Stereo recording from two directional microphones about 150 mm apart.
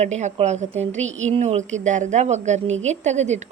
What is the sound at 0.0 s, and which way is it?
A woman's voice, 50° right (ahead or behind).